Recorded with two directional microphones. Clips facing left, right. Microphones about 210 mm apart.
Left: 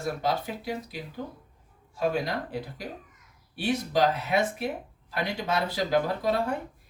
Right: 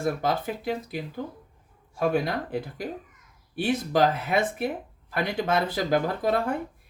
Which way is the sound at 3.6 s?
55° right (ahead or behind).